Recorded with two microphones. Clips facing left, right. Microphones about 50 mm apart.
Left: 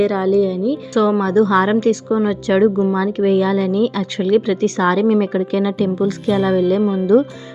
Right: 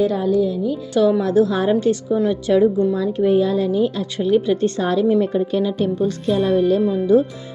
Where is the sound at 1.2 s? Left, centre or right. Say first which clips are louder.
Left 3 dB; left.